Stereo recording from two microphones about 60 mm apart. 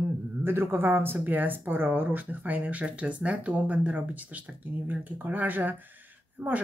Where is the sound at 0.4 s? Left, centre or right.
Right.